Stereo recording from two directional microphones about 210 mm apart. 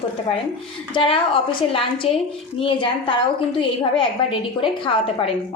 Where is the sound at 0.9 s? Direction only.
25° left (ahead or behind).